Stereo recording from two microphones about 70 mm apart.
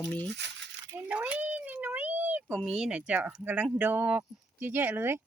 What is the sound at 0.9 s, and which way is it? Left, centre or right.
Cat, right.